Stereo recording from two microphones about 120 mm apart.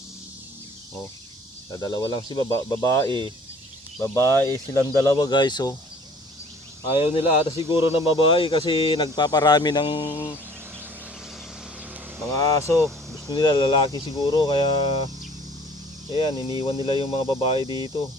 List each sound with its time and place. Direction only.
1.7 s speech: 35° left (ahead or behind)
4.1 s speech: 25° left (ahead or behind)
5.3 s speech: 35° left (ahead or behind)
6.9 s speech: 50° left (ahead or behind)
12.3 s speech: 30° left (ahead or behind)
13.3 s speech: 35° left (ahead or behind)
16.1 s speech: 45° left (ahead or behind)